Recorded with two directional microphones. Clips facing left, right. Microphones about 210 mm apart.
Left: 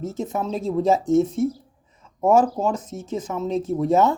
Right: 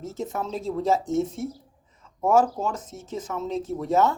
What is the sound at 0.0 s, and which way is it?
Speech, 15° left (ahead or behind).